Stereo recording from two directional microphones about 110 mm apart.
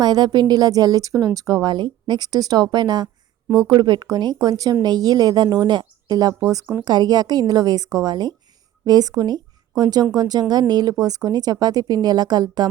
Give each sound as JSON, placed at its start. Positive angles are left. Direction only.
{"t": 0.0, "sound": "speech", "side_deg": -40}